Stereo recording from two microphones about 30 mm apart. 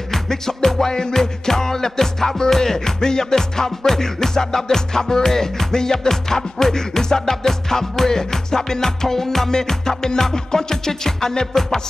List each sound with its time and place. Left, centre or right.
0.1 s music: centre